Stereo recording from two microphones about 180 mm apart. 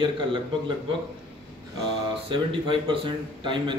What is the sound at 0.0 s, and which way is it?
Speech, 25° right (ahead or behind).